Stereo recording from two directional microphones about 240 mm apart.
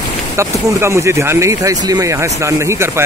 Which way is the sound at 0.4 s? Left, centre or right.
Centre.